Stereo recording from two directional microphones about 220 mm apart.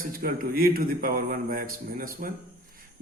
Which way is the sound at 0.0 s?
40° right (ahead or behind).